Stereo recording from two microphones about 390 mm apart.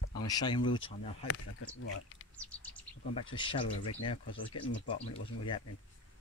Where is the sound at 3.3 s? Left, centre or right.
Centre.